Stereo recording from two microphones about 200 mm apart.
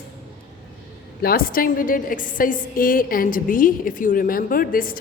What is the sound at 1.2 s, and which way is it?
A woman's voice, 50° left (ahead or behind).